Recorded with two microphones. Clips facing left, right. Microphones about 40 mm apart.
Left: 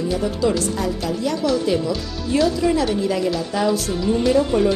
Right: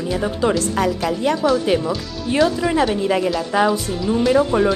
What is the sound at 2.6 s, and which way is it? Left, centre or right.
Speech, centre.